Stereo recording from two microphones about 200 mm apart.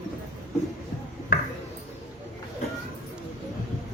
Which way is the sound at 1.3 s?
45° left (ahead or behind).